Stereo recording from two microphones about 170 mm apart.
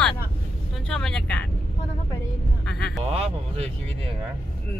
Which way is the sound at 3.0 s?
35° right (ahead or behind).